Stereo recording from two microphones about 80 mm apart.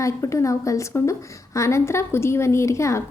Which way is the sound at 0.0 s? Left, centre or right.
Left.